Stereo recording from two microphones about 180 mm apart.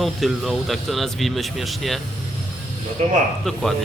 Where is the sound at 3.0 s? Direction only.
40° right (ahead or behind).